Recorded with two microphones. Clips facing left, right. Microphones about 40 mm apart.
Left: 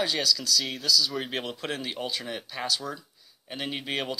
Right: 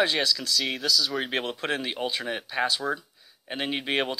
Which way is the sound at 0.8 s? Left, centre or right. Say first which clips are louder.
Left 1 dB; centre.